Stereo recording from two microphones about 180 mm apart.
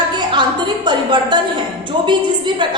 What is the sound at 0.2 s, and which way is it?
Music, 25° right (ahead or behind).